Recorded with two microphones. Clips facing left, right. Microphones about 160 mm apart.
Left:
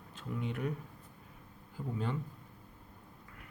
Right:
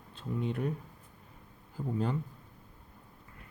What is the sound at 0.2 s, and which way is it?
Speech, 35° right (ahead or behind).